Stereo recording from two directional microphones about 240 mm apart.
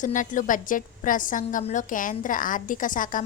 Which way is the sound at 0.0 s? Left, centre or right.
Left.